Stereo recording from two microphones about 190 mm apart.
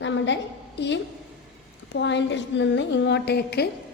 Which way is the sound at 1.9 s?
70° left (ahead or behind).